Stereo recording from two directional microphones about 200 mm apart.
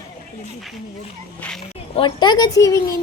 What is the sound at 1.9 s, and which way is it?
Speech, 25° left (ahead or behind).